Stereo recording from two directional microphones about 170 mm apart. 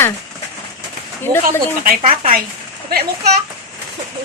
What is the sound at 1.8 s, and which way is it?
Speech, 50° right (ahead or behind).